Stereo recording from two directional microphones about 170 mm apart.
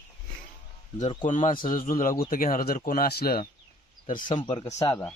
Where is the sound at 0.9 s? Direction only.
40° left (ahead or behind).